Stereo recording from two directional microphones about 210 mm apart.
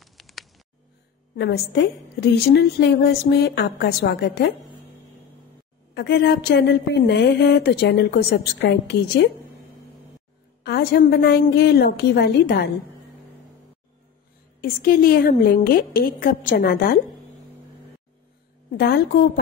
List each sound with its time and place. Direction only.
0.0 s a sound: centre (ahead or behind)
1.3 s a woman's voice: 50° left (ahead or behind)
5.9 s a woman's voice: 55° left (ahead or behind)
10.6 s a woman's voice: 50° left (ahead or behind)
14.6 s a woman's voice: 45° left (ahead or behind)
18.7 s a woman's voice: 45° left (ahead or behind)